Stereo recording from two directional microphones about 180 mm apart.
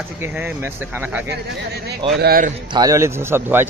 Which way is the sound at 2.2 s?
55° right (ahead or behind).